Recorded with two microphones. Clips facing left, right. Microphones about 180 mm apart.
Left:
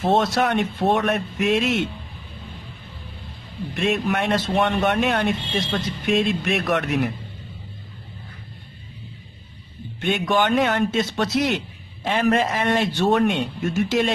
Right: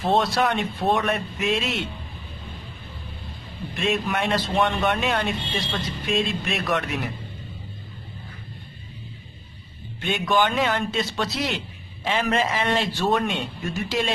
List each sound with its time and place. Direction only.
0.0 s speech: 50° left (ahead or behind)
3.7 s speech: 55° left (ahead or behind)
9.9 s speech: 55° left (ahead or behind)